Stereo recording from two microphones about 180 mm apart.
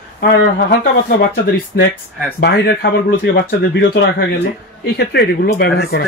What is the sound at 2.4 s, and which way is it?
A man's voice, 70° left (ahead or behind).